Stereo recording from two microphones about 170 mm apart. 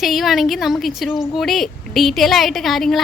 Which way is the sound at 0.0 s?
Centre (ahead or behind).